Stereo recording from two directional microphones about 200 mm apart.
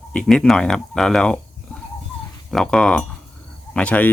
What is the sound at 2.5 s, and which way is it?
Speech, 5° left (ahead or behind).